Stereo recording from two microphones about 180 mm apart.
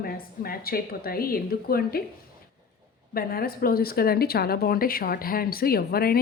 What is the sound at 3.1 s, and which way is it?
Speech, 55° left (ahead or behind).